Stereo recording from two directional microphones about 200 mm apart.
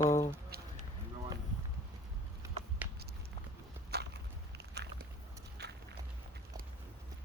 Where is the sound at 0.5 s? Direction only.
50° right (ahead or behind).